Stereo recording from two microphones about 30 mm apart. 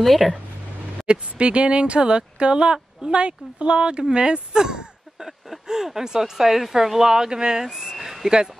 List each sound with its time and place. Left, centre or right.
0.0 s speech: centre
1.0 s speech: right
7.6 s speech: centre
7.9 s a sound: centre